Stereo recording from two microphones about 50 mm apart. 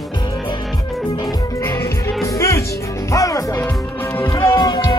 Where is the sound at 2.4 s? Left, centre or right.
Left.